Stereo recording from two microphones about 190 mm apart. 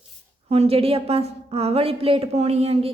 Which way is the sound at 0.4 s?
30° right (ahead or behind).